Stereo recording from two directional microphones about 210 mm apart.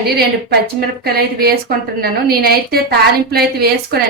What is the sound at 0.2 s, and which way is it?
A woman's voice, 50° right (ahead or behind).